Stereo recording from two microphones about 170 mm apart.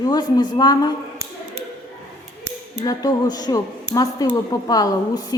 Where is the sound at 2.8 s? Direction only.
20° left (ahead or behind).